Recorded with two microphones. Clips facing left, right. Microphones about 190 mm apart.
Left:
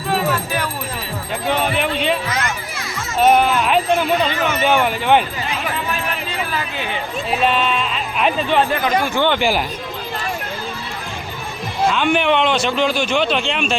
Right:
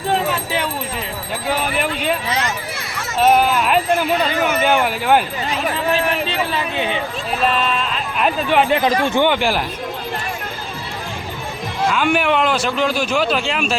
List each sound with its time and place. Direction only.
0.1 s a sound: 25° right (ahead or behind)
1.5 s speech: 5° right (ahead or behind)
3.2 s speech: 5° right (ahead or behind)
5.9 s a sound: 25° right (ahead or behind)
7.3 s speech: centre (ahead or behind)
8.7 s speech: 25° right (ahead or behind)
9.2 s speech: 5° right (ahead or behind)
11.9 s speech: 5° right (ahead or behind)